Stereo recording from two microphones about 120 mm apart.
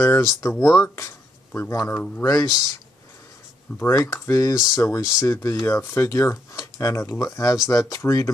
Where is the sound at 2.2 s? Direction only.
30° left (ahead or behind).